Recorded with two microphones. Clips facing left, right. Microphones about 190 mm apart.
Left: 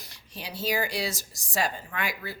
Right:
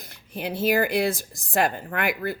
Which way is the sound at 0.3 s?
55° right (ahead or behind).